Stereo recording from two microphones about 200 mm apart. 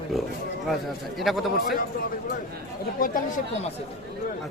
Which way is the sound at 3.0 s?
40° left (ahead or behind).